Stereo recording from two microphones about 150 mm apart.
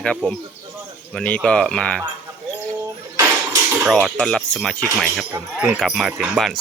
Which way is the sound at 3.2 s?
20° right (ahead or behind).